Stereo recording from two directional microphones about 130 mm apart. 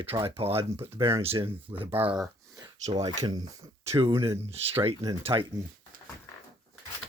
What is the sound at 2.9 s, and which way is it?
Speech, 45° right (ahead or behind).